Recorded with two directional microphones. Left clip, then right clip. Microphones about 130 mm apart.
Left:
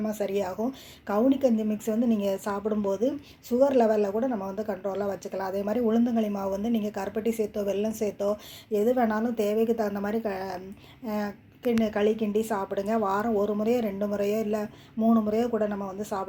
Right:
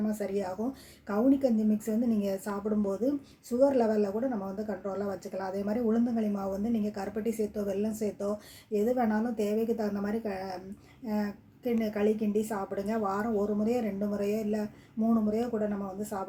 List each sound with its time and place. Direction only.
0.1 s a woman's voice: 15° left (ahead or behind)